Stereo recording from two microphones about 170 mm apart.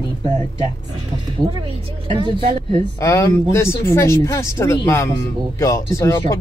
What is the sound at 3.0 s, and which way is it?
Speech, 15° left (ahead or behind).